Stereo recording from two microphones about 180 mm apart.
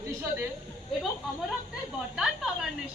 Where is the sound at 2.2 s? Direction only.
5° right (ahead or behind).